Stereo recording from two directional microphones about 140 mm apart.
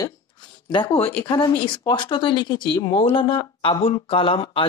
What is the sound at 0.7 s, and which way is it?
Speech, 40° left (ahead or behind).